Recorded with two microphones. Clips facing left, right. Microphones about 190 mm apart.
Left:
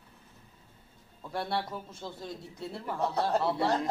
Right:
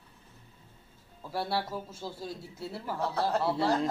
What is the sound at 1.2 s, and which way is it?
A man's voice, 5° right (ahead or behind).